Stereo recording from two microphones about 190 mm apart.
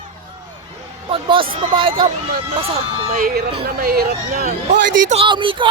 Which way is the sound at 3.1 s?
50° right (ahead or behind).